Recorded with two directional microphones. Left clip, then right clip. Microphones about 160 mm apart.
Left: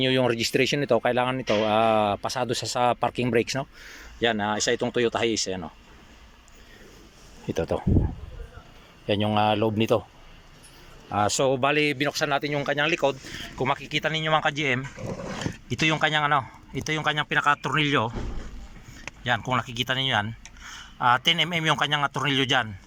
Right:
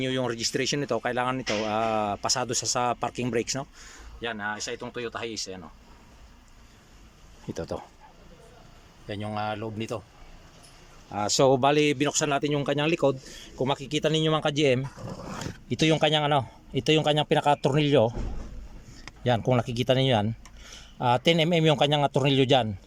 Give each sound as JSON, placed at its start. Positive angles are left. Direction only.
{"t": 0.0, "sound": "speech", "side_deg": -5}
{"t": 4.2, "sound": "speech", "side_deg": 25}
{"t": 7.4, "sound": "speech", "side_deg": 0}
{"t": 9.0, "sound": "speech", "side_deg": 15}
{"t": 11.3, "sound": "speech", "side_deg": -30}
{"t": 19.2, "sound": "speech", "side_deg": -30}